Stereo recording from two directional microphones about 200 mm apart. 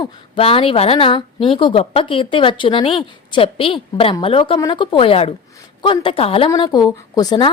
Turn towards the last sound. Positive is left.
turn(degrees=20)  # may be behind; listen again after turning